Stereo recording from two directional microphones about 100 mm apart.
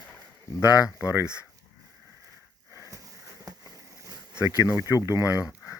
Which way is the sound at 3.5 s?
35° right (ahead or behind).